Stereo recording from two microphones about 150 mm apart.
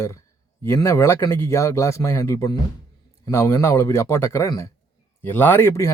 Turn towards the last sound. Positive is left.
turn(degrees=15)  # may be behind; listen again after turning